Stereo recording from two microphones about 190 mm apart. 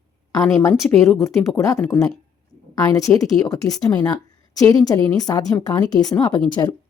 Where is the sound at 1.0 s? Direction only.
15° left (ahead or behind).